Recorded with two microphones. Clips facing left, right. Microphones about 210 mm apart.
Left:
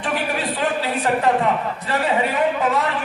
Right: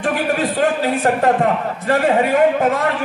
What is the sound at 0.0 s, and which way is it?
A man's voice, 45° right (ahead or behind).